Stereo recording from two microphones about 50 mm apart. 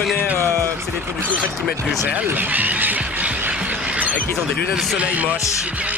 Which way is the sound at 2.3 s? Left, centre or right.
Right.